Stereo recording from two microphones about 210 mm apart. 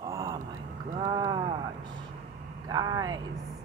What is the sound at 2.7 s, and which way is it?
Speech, 20° right (ahead or behind).